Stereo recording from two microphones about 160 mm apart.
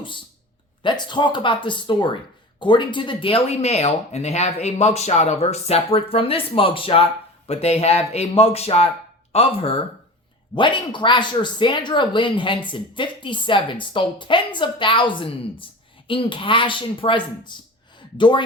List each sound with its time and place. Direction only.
0.8 s speech: 30° left (ahead or behind)